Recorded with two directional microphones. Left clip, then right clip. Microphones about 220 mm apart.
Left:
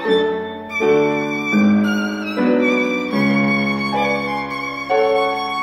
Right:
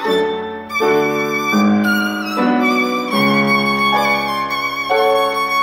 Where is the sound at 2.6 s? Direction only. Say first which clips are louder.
Right 2 dB; 15° right (ahead or behind).